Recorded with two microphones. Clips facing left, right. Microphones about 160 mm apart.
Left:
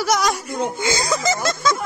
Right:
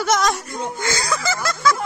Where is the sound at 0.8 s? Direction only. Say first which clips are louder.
Left 1 dB; 20° left (ahead or behind).